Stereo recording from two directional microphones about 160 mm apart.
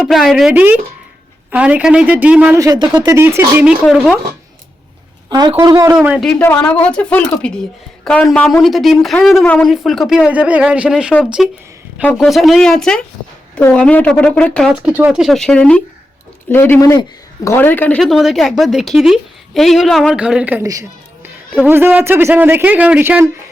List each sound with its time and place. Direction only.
0.0 s speech: centre (ahead or behind)
0.5 s speech: 10° right (ahead or behind)
2.6 s a woman's voice: 25° right (ahead or behind)
3.2 s speech: 15° right (ahead or behind)
5.3 s a woman's voice: 25° right (ahead or behind)
6.0 s speech: 10° right (ahead or behind)
6.2 s speech: 10° left (ahead or behind)
14.7 s speech: 5° right (ahead or behind)